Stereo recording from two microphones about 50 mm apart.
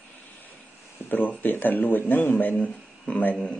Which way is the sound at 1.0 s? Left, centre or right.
Left.